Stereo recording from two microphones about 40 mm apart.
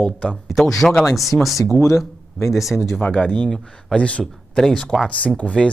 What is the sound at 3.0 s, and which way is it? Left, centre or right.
Speech, left.